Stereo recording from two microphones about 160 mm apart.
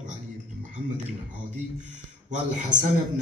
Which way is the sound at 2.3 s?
50° right (ahead or behind).